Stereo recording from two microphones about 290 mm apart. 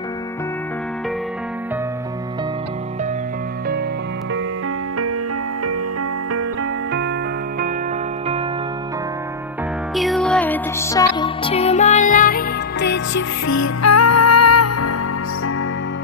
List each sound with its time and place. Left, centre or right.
9.9 s music: centre; by 13.2 s left
13.5 s music: left